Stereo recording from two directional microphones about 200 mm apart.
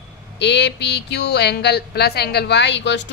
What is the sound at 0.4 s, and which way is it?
Speech, 60° left (ahead or behind).